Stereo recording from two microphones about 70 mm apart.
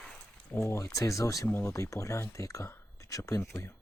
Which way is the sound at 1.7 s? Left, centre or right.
Left.